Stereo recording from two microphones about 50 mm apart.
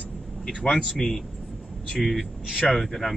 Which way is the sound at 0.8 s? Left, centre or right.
Centre.